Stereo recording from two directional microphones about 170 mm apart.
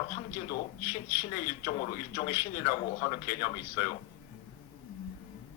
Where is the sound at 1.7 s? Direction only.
40° left (ahead or behind).